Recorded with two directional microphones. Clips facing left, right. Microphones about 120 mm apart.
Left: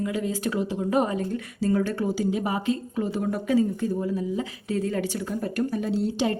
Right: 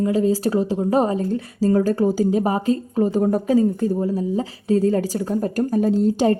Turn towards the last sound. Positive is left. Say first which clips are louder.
# right 8 dB
turn(degrees=-45)  # may be behind; listen again after turning